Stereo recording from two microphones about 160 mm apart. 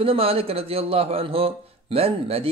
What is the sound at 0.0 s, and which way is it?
A man's voice, 35° right (ahead or behind).